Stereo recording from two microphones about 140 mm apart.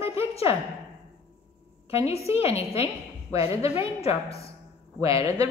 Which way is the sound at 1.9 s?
45° left (ahead or behind).